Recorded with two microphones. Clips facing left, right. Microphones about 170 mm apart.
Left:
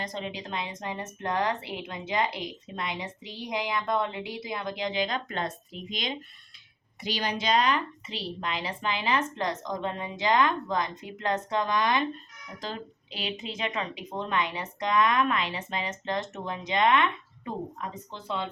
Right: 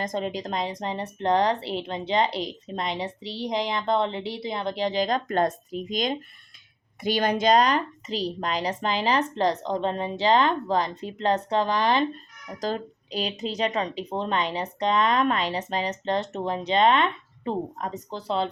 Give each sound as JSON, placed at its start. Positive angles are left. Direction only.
{"t": 0.0, "sound": "speech", "side_deg": -45}